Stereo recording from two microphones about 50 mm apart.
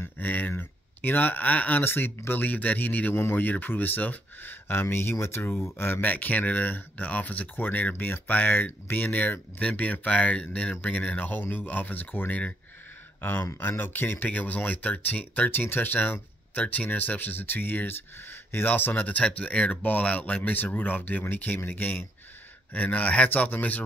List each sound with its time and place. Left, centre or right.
0.2 s a sound: left
0.5 s speech: left
1.8 s speech: left
4.8 s speech: left
6.0 s speech: left
11.4 s speech: left
13.2 s speech: left
14.3 s speech: left